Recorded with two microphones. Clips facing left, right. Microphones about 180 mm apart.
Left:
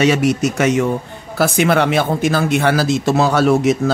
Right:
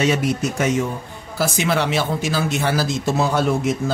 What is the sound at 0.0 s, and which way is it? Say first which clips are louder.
Speech: left 5 dB; 75° left (ahead or behind).